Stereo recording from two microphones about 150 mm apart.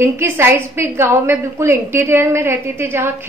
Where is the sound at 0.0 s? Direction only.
15° right (ahead or behind).